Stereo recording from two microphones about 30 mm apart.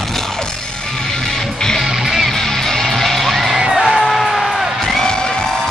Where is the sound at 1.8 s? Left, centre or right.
Centre.